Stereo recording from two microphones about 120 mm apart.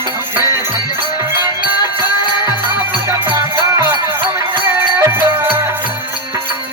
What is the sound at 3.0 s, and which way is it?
Music, 20° right (ahead or behind).